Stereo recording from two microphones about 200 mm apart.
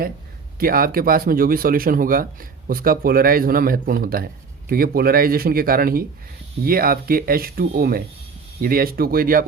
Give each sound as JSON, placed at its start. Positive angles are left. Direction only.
{"t": 0.6, "sound": "speech", "side_deg": -45}